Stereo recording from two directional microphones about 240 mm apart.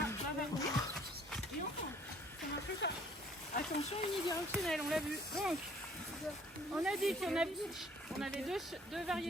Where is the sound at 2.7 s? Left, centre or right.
Left.